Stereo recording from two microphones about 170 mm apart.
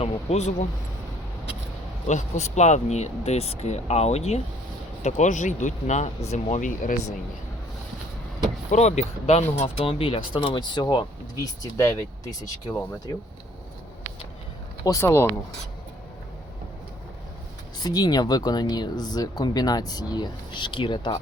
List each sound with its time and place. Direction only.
0.0 s speech: 40° left (ahead or behind)
2.0 s speech: 45° left (ahead or behind)
8.7 s speech: 40° left (ahead or behind); by 12.5 s 20° left (ahead or behind)
14.8 s speech: 15° left (ahead or behind)
17.8 s speech: 25° left (ahead or behind)